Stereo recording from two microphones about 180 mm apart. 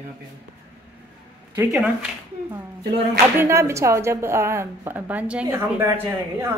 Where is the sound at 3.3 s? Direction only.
15° right (ahead or behind).